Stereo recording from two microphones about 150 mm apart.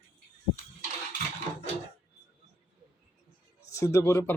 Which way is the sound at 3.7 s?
20° left (ahead or behind).